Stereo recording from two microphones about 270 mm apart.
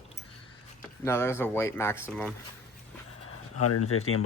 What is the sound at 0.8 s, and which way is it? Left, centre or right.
Speech, centre.